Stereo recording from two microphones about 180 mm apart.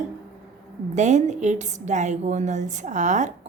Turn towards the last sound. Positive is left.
turn(degrees=-40)  # may be behind; listen again after turning